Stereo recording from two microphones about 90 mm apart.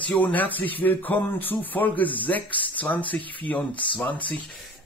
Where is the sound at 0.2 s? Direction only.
20° left (ahead or behind).